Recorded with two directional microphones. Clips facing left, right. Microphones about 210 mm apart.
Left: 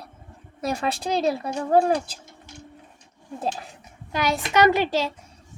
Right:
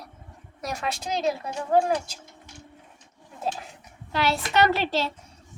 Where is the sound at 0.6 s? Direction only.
30° left (ahead or behind).